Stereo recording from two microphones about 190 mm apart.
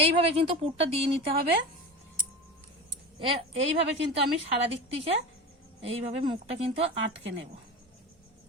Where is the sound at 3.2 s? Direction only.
30° right (ahead or behind).